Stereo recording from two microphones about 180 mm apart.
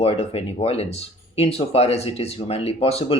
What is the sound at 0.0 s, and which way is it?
Speech, 35° left (ahead or behind).